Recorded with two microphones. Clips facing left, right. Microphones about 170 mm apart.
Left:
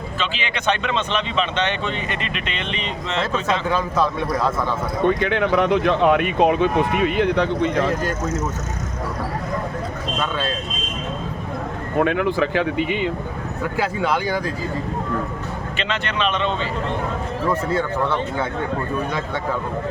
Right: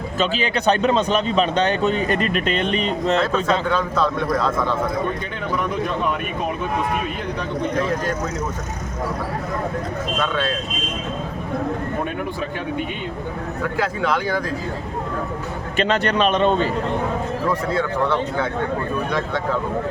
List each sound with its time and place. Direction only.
0.2 s speech: 40° right (ahead or behind)
3.7 s a man's voice: 5° left (ahead or behind)
5.0 s speech: 80° left
11.9 s speech: 85° left
13.7 s a man's voice: 10° left (ahead or behind)
15.8 s speech: 40° right (ahead or behind)